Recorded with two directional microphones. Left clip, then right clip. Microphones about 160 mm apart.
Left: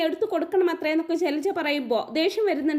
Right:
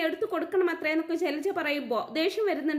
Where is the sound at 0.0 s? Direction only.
30° left (ahead or behind).